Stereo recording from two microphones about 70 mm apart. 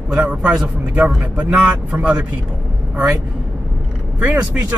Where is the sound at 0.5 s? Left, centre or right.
Centre.